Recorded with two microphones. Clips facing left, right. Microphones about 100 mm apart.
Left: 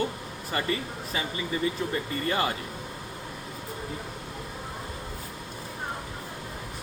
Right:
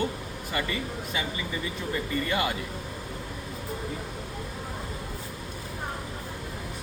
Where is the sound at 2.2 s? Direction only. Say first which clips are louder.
Left 2 dB; 35° left (ahead or behind).